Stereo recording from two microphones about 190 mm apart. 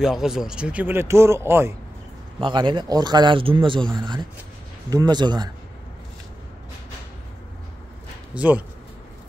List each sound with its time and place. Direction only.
0.0 s speech: centre (ahead or behind)
2.4 s a man's voice: 25° right (ahead or behind)
8.4 s speech: 10° right (ahead or behind)